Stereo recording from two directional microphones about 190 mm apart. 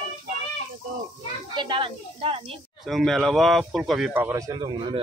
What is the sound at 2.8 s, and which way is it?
Speech, centre (ahead or behind).